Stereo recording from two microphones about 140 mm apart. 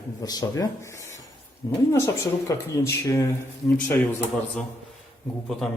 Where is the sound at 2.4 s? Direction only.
20° left (ahead or behind).